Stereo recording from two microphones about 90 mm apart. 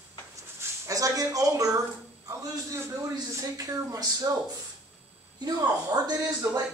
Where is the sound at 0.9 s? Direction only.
40° right (ahead or behind).